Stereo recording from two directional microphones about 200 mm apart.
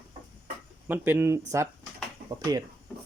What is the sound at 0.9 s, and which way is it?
Speech, 10° right (ahead or behind).